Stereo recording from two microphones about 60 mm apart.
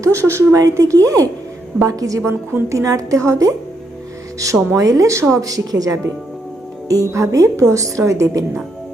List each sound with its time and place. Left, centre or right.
0.0 s speech: right
0.6 s a woman's voice: right
4.7 s a woman's voice: right
5.4 s a woman's voice: right
7.1 s a woman's voice: right